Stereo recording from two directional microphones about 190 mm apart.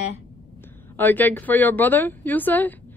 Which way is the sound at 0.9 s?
10° left (ahead or behind).